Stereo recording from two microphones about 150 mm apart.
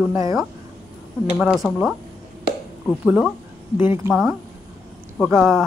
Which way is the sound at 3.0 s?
5° right (ahead or behind).